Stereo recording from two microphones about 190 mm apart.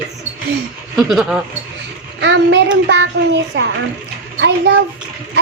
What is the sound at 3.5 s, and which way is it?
A child's voice, 75° right (ahead or behind).